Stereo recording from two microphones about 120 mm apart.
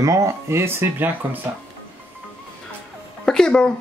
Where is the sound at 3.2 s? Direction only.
5° left (ahead or behind).